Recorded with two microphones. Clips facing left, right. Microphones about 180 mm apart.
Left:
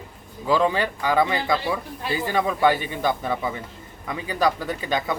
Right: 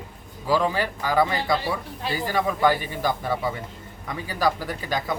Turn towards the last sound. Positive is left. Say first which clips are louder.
# left 2 dB
turn(degrees=20)  # may be behind; listen again after turning